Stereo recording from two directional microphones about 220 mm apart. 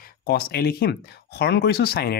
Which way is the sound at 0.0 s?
45° left (ahead or behind).